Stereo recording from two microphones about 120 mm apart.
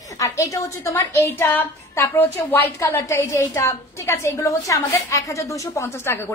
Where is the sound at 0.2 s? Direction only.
25° left (ahead or behind).